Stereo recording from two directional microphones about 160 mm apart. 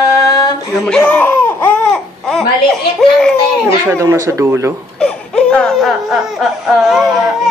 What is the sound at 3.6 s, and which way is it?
Speech, 15° right (ahead or behind).